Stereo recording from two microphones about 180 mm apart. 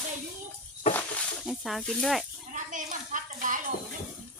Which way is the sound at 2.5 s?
45° right (ahead or behind).